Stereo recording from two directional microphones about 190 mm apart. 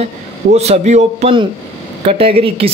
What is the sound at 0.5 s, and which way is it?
Speech, 35° right (ahead or behind).